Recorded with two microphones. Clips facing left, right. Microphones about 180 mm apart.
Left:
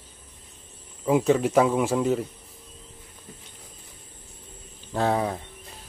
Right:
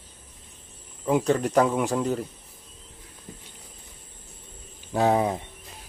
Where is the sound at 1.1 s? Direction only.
Centre (ahead or behind).